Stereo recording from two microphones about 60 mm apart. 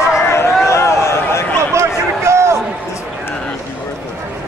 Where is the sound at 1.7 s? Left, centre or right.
Right.